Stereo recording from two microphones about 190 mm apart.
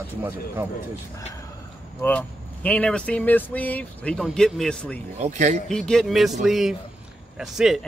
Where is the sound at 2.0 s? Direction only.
10° left (ahead or behind).